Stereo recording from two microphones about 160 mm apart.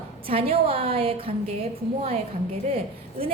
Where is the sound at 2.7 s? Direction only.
35° right (ahead or behind).